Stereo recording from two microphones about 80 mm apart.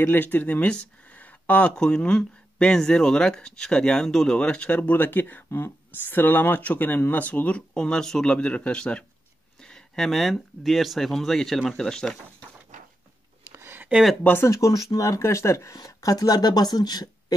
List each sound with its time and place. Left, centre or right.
0.0 s speech: left; by 12.2 s centre
13.5 s a sound: right
14.2 s speech: left
14.5 s speech: left